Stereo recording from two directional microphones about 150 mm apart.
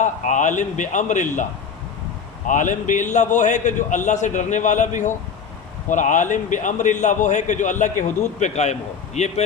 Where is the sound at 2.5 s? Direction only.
55° left (ahead or behind).